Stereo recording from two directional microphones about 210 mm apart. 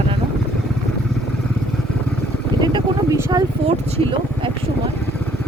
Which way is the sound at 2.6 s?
20° right (ahead or behind).